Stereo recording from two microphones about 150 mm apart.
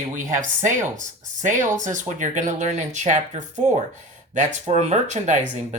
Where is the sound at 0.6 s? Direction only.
55° right (ahead or behind).